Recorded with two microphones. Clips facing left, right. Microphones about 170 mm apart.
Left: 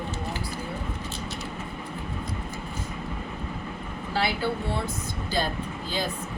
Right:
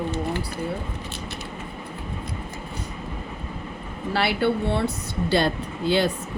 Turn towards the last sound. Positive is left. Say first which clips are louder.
# right 8 dB
turn(degrees=-75)  # may be behind; listen again after turning